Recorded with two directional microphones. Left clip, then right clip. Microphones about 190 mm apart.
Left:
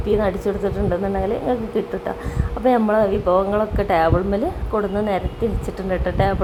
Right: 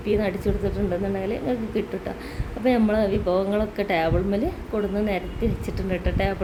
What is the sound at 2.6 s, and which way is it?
A woman's voice, 10° right (ahead or behind).